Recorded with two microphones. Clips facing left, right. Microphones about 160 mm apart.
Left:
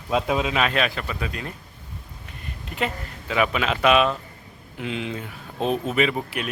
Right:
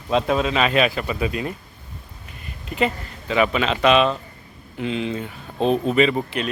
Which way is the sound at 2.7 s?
Centre (ahead or behind).